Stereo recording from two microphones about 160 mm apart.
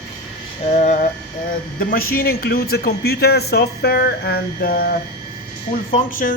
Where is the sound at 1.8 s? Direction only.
65° left (ahead or behind).